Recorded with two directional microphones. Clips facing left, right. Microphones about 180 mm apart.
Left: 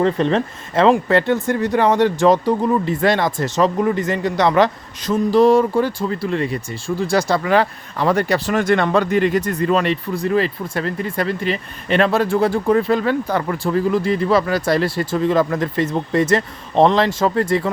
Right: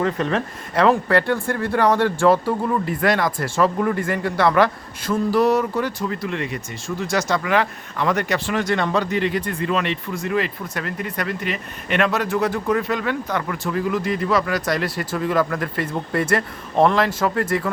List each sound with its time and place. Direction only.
0.0 s speech: 30° left (ahead or behind)
8.5 s speech: 55° left (ahead or behind); by 17.4 s 25° left (ahead or behind)